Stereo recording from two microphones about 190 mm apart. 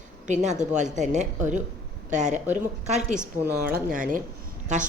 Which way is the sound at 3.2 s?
5° right (ahead or behind).